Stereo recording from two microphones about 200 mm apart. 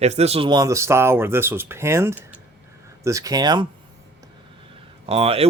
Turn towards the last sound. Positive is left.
turn(degrees=-30)  # may be behind; listen again after turning